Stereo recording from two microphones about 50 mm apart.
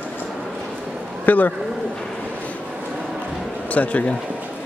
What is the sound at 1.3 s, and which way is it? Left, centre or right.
Speech, left.